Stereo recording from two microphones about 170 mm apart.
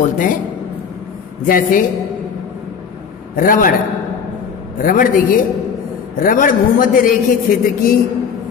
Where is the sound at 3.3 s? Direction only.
55° left (ahead or behind).